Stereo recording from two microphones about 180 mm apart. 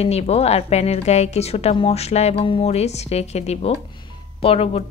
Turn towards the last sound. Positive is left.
turn(degrees=35)  # may be behind; listen again after turning